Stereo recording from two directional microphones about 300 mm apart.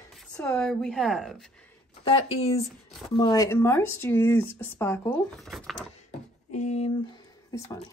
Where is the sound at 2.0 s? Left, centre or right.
Centre.